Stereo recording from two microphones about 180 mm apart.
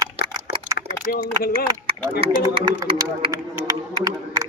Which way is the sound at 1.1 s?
55° left (ahead or behind).